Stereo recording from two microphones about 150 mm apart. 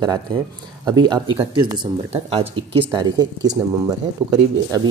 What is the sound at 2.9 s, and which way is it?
Speech, 25° right (ahead or behind).